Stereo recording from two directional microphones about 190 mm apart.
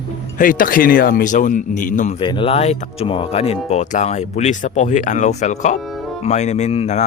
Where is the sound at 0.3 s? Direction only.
45° left (ahead or behind).